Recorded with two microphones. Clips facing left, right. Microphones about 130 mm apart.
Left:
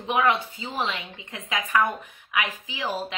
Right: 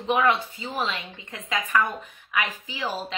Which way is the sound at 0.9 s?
15° left (ahead or behind).